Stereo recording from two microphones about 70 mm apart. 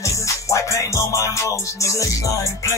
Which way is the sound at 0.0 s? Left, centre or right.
Left.